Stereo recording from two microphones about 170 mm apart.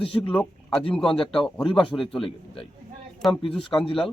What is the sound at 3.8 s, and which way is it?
Speech, 30° left (ahead or behind).